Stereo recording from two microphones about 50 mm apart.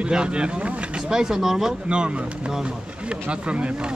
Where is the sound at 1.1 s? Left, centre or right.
Centre.